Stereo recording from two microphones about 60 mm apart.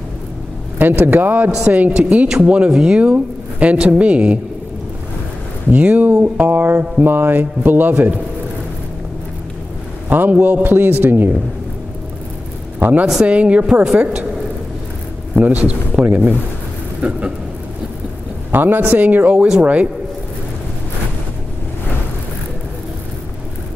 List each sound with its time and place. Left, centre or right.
0.7 s speech: right
5.7 s speech: right
10.0 s speech: right
12.7 s a sound: right
13.0 s speech: centre
13.3 s speech: right
15.4 s speech: right
18.5 s speech: right
19.3 s speech: centre
19.6 s speech: right